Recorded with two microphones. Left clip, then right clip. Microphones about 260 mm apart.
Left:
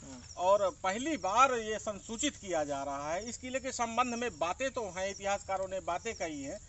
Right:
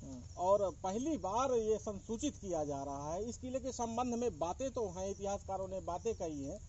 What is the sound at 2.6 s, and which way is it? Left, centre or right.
Speech, centre.